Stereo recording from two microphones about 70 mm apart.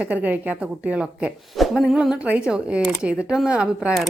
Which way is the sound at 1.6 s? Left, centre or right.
Centre.